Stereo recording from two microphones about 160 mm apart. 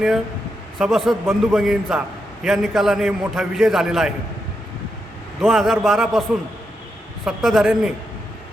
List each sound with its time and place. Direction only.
0.8 s a man's voice: centre (ahead or behind)
5.4 s a man's voice: centre (ahead or behind)
7.3 s a man's voice: centre (ahead or behind)